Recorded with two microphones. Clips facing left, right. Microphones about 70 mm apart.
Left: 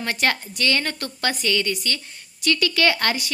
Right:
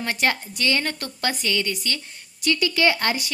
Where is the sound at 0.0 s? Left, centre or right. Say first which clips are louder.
Even; centre.